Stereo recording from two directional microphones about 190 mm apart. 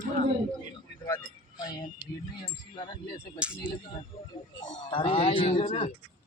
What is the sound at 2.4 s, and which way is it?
Speech, 25° left (ahead or behind).